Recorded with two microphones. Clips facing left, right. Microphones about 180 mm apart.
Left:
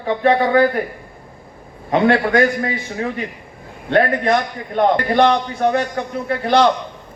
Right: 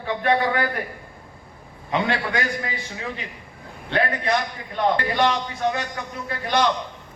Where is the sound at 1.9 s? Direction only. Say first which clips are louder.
Left 9 dB; 50° left (ahead or behind).